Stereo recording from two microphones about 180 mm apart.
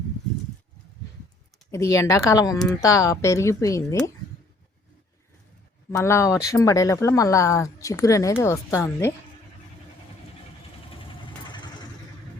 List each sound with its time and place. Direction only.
1.7 s speech: 15° left (ahead or behind)
6.0 s speech: 15° left (ahead or behind)
11.2 s vehicle: 25° left (ahead or behind)